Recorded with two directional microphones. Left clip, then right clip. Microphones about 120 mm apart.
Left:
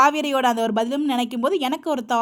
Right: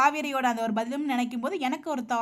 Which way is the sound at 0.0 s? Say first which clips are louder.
Left 6 dB; 50° left (ahead or behind).